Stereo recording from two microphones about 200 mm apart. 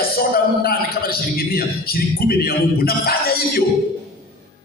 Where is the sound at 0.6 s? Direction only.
50° left (ahead or behind).